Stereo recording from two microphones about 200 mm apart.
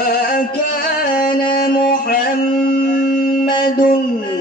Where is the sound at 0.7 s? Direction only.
50° left (ahead or behind).